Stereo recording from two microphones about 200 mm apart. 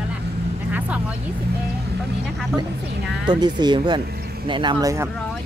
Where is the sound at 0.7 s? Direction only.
10° right (ahead or behind).